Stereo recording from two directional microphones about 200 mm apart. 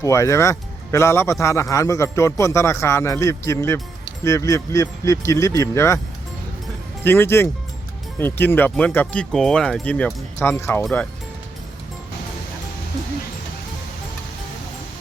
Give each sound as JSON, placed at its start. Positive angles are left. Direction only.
{"t": 0.0, "sound": "speech", "side_deg": 15}
{"t": 7.0, "sound": "speech", "side_deg": 10}